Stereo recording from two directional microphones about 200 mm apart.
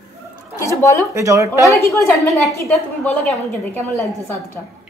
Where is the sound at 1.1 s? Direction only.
15° right (ahead or behind).